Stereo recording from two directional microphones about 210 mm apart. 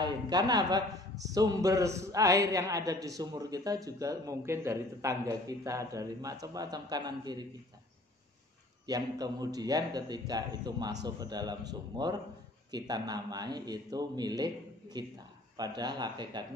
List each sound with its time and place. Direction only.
0.0 s a man's voice: 20° right (ahead or behind)
8.8 s a man's voice: 20° right (ahead or behind)